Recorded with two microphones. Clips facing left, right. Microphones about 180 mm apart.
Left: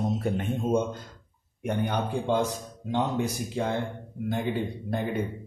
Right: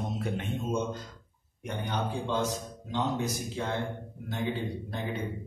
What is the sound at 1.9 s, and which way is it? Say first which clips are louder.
Speech: left 1 dB; 55° left (ahead or behind).